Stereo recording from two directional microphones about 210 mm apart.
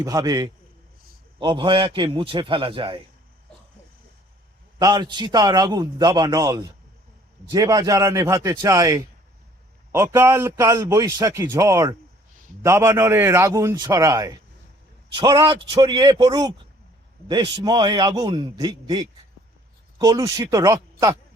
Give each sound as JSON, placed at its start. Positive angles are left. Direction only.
{"t": 0.0, "sound": "a man's voice", "side_deg": -15}
{"t": 4.8, "sound": "a man's voice", "side_deg": -20}